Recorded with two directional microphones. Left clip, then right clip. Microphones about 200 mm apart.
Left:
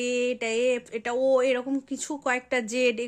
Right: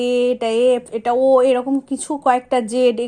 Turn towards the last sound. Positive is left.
turn(degrees=10)  # may be behind; listen again after turning